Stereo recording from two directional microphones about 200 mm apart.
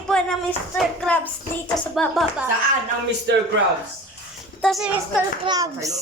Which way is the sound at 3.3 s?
65° right (ahead or behind).